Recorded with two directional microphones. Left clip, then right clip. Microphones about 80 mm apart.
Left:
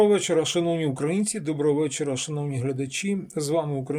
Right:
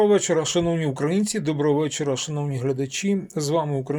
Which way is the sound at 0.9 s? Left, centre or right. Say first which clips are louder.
Right 3 dB; centre.